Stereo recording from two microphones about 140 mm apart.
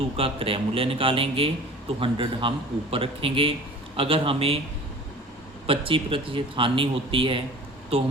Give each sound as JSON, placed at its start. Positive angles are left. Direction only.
{"t": 0.0, "sound": "speech", "side_deg": -40}
{"t": 5.6, "sound": "speech", "side_deg": -40}